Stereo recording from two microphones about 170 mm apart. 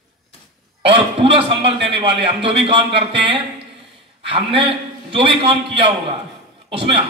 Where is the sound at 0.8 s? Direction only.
30° right (ahead or behind).